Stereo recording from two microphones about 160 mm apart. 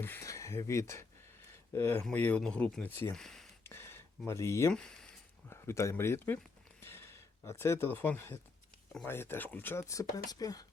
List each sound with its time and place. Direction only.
0.0 s speech: 15° left (ahead or behind)
3.6 s a sound: 15° left (ahead or behind)
4.3 s speech: 15° left (ahead or behind)
4.7 s speech: 5° left (ahead or behind)
5.5 s speech: 15° left (ahead or behind)
6.8 s a sound: 15° left (ahead or behind)
9.0 s speech: 15° left (ahead or behind)